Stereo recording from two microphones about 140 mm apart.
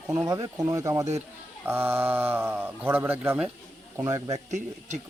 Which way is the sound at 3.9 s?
25° right (ahead or behind).